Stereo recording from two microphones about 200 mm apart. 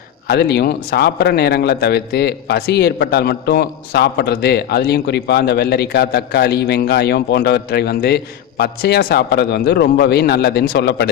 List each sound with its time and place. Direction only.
0.3 s a man's voice: 55° left (ahead or behind)